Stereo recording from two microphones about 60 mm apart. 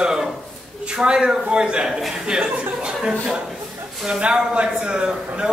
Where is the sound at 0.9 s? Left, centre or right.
Centre.